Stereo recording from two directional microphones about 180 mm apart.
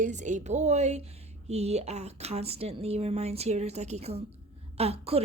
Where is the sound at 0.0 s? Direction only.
45° right (ahead or behind).